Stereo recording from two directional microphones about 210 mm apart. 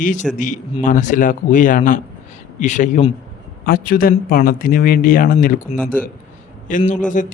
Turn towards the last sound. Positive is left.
turn(degrees=40)  # may be behind; listen again after turning